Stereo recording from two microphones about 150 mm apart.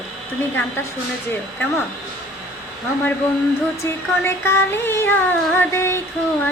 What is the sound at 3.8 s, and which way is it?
Child singing, 15° left (ahead or behind).